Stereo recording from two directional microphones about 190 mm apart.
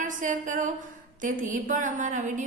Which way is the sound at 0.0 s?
40° right (ahead or behind).